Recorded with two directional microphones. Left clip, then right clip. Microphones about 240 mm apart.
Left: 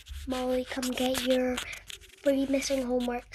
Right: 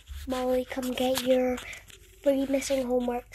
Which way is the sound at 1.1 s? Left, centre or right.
Left.